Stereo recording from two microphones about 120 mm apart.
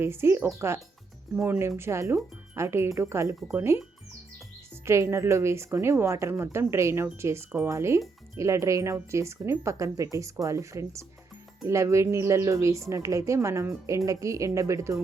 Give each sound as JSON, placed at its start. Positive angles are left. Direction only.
{"t": 0.0, "sound": "speech", "side_deg": -20}
{"t": 4.9, "sound": "speech", "side_deg": -25}